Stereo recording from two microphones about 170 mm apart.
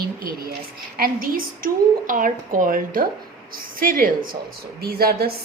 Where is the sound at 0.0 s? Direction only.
60° right (ahead or behind).